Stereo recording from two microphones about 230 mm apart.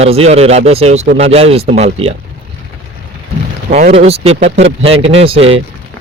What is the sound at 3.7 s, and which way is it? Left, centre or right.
A man's voice, right.